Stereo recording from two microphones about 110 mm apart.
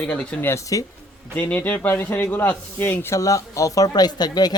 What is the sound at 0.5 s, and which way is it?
Speech, 30° left (ahead or behind).